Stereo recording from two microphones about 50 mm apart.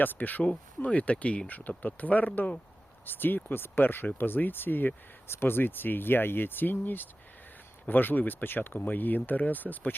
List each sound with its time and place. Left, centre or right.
0.0 s speech: left